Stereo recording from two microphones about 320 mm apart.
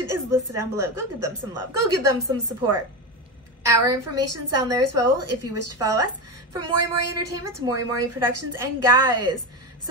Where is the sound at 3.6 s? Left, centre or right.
Centre.